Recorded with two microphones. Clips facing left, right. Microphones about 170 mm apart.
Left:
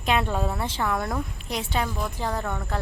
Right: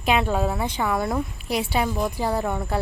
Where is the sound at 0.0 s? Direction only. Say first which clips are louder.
Right 3 dB; 5° right (ahead or behind).